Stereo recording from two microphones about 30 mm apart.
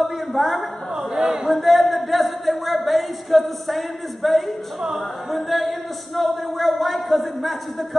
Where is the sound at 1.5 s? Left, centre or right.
Centre.